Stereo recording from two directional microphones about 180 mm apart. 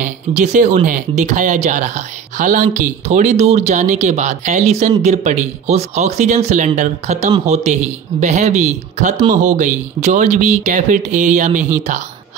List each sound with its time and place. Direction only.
0.0 s speech: 40° right (ahead or behind)